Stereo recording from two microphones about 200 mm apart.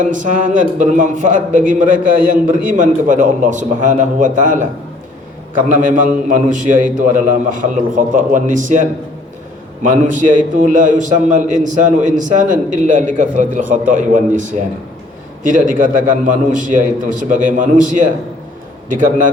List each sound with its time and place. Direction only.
0.0 s a man's voice: 40° right (ahead or behind)